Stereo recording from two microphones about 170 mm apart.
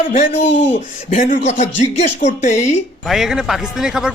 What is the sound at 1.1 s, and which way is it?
Speech, 50° left (ahead or behind).